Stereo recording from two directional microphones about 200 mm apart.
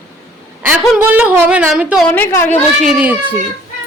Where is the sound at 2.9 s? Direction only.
5° right (ahead or behind).